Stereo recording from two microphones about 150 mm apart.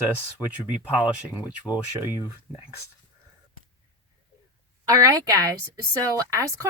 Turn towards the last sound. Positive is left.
turn(degrees=-20)  # may be behind; listen again after turning